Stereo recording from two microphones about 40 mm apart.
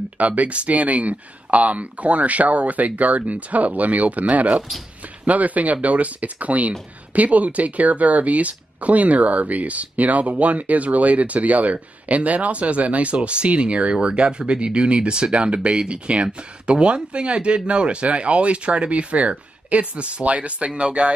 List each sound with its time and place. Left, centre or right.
0.2 s speech: right